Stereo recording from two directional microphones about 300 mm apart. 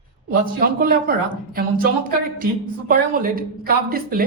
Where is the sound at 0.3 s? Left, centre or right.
Right.